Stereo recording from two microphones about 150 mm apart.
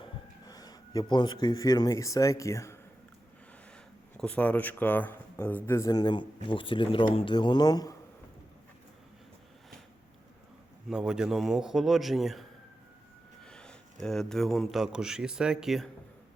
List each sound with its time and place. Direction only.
0.0 s speech: 25° left (ahead or behind)
4.2 s speech: 10° left (ahead or behind); by 7.9 s 25° left (ahead or behind)
10.8 s a man's voice: 5° right (ahead or behind)